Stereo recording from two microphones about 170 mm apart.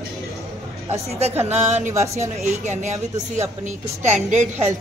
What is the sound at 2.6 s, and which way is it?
Speech, 45° right (ahead or behind).